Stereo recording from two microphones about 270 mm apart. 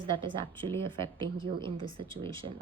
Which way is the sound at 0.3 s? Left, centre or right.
Centre.